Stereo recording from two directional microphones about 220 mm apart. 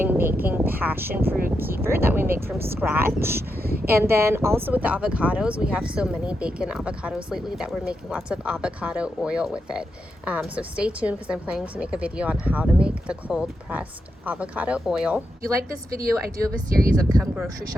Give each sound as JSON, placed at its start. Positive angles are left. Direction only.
{"t": 0.0, "sound": "a sound", "side_deg": -10}
{"t": 0.4, "sound": "speech", "side_deg": -10}
{"t": 3.6, "sound": "speech", "side_deg": -45}
{"t": 3.8, "sound": "speech", "side_deg": -10}
{"t": 16.9, "sound": "speech", "side_deg": -15}